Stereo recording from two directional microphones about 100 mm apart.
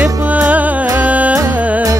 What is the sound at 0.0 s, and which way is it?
Music, 15° right (ahead or behind).